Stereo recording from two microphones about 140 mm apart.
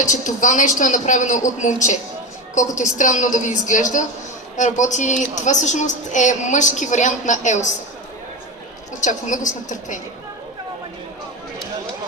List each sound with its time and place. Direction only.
0.0 s speech: 60° left (ahead or behind)
9.0 s speech: 65° left (ahead or behind)